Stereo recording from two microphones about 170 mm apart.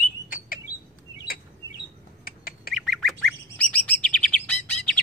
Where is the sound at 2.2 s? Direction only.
60° left (ahead or behind).